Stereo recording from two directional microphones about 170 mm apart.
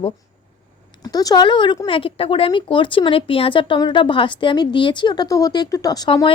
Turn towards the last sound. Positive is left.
turn(degrees=25)  # may be behind; listen again after turning